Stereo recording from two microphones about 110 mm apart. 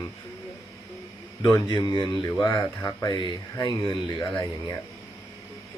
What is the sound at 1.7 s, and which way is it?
Speech, 40° left (ahead or behind).